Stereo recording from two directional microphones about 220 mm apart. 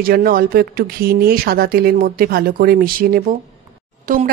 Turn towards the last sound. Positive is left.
turn(degrees=-35)  # may be behind; listen again after turning